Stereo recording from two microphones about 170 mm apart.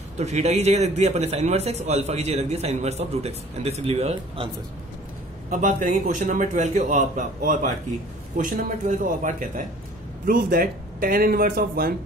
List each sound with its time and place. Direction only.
0.2 s a man's voice: 40° right (ahead or behind)
5.5 s a man's voice: 50° right (ahead or behind)